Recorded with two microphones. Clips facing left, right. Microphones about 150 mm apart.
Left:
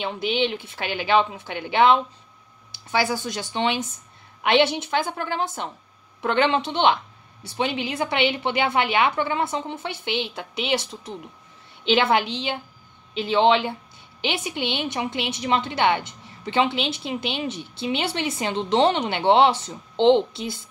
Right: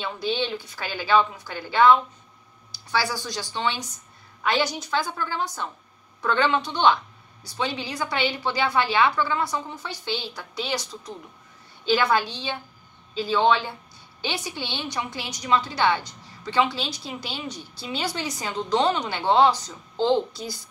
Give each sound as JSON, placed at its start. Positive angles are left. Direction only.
{"t": 0.0, "sound": "a woman's voice", "side_deg": 20}
{"t": 3.0, "sound": "a woman's voice", "side_deg": 20}
{"t": 5.1, "sound": "a woman's voice", "side_deg": 60}
{"t": 5.4, "sound": "a woman's voice", "side_deg": 20}